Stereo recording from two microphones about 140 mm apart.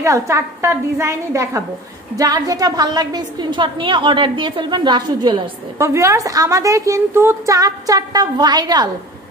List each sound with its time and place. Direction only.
0.0 s a woman's voice: 20° right (ahead or behind)
5.8 s a woman's voice: 20° right (ahead or behind)